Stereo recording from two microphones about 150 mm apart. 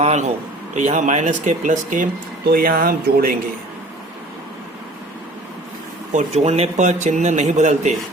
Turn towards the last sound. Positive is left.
turn(degrees=-50)  # may be behind; listen again after turning